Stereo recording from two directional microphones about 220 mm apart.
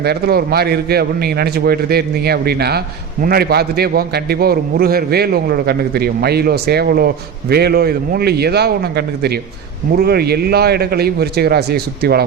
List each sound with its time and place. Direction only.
0.0 s a man's voice: 45° right (ahead or behind)